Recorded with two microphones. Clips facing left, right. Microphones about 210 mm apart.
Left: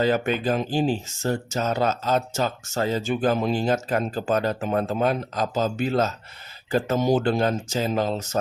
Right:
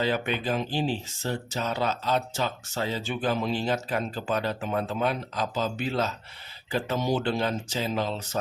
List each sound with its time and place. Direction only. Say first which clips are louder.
0.0 s speech: left 5 dB; 45° left (ahead or behind)